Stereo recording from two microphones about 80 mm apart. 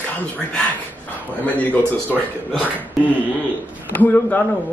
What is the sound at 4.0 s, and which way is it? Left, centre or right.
Speech, left.